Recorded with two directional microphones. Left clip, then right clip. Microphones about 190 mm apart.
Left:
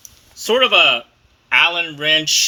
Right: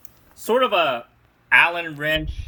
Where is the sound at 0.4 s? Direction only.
5° left (ahead or behind).